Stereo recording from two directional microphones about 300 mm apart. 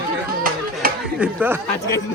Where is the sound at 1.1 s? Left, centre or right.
Centre.